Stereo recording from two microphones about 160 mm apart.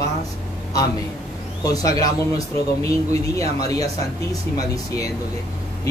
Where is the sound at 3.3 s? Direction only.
20° left (ahead or behind).